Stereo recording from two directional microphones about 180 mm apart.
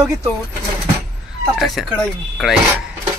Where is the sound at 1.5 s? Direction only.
Centre (ahead or behind).